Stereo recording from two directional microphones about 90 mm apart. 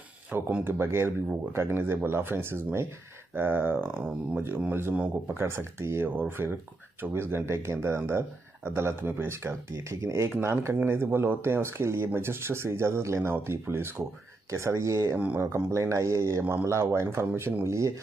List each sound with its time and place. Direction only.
0.3 s speech: 15° right (ahead or behind)
0.7 s speech: 25° right (ahead or behind)
15.1 s speech: 15° right (ahead or behind)
15.4 s speech: 30° right (ahead or behind)